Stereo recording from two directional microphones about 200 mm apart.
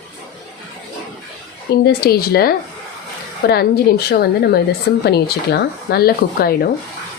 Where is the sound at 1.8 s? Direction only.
50° left (ahead or behind).